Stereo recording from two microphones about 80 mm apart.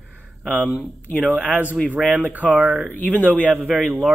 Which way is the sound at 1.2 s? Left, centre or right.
Centre.